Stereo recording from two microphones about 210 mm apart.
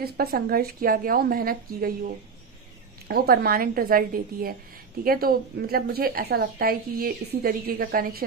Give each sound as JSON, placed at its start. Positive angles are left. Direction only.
{"t": 0.0, "sound": "a woman's voice", "side_deg": -45}
{"t": 3.1, "sound": "a woman's voice", "side_deg": -45}